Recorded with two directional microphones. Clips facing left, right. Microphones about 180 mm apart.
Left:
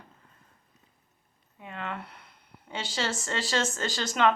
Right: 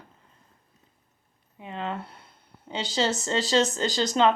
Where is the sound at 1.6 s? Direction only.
25° right (ahead or behind).